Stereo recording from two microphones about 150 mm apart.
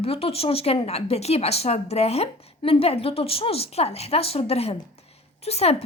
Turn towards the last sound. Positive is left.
turn(degrees=45)  # may be behind; listen again after turning